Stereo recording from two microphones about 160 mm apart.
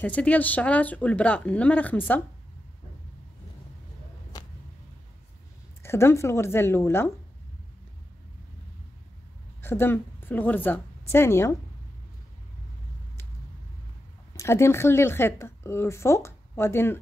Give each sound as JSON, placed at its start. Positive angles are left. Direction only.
{"t": 0.0, "sound": "a woman's voice", "side_deg": 10}
{"t": 5.8, "sound": "a woman's voice", "side_deg": 15}
{"t": 9.6, "sound": "a woman's voice", "side_deg": 15}
{"t": 14.3, "sound": "a woman's voice", "side_deg": 15}